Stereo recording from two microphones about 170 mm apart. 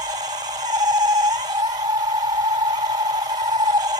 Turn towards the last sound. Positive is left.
turn(degrees=-20)  # may be behind; listen again after turning